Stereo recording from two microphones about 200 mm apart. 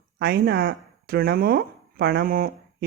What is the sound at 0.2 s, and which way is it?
Speech, 55° right (ahead or behind).